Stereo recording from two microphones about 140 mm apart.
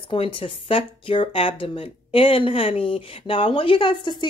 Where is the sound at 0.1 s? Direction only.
40° left (ahead or behind).